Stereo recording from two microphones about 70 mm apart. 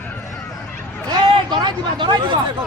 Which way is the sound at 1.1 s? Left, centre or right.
Right.